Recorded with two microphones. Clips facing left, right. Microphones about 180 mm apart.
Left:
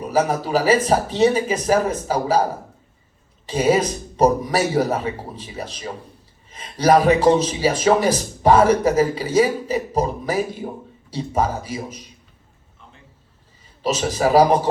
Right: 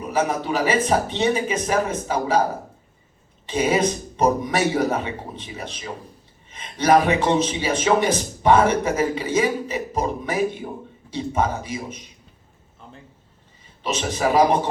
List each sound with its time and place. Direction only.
0.1 s a man's voice: 35° left (ahead or behind)
3.4 s a man's voice: 35° left (ahead or behind)
13.8 s a man's voice: 40° left (ahead or behind)